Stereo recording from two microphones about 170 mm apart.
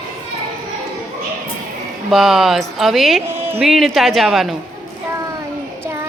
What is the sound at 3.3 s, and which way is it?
Music, 15° right (ahead or behind).